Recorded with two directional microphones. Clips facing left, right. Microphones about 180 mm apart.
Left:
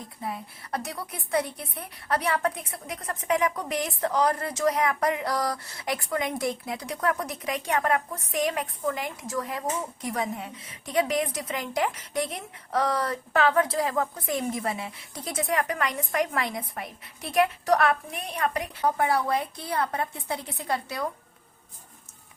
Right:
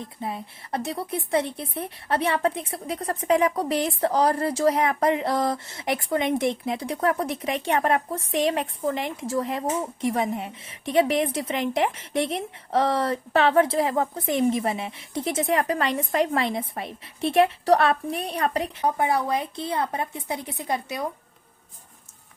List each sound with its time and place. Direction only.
0.0 s a woman's voice: 25° right (ahead or behind)
18.8 s a woman's voice: 20° right (ahead or behind)